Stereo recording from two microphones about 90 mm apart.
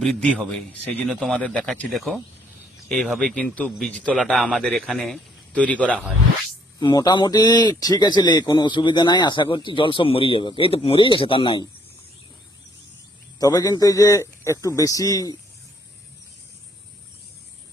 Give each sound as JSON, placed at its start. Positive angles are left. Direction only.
{"t": 0.0, "sound": "a man's voice", "side_deg": 5}
{"t": 5.5, "sound": "speech", "side_deg": 15}
{"t": 6.8, "sound": "a man's voice", "side_deg": 55}
{"t": 10.0, "sound": "a man's voice", "side_deg": 85}
{"t": 13.4, "sound": "a man's voice", "side_deg": 45}